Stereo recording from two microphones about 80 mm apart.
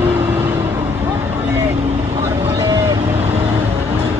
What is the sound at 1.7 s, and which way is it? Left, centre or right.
Vehicle, right.